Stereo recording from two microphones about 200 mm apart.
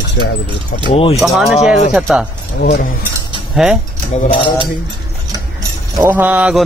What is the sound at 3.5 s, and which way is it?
Speech, centre (ahead or behind).